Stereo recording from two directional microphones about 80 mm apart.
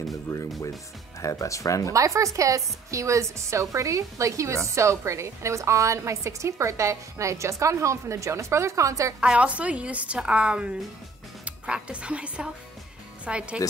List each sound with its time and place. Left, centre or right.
0.1 s speech: left
1.9 s a woman's voice: right
9.2 s a woman's voice: centre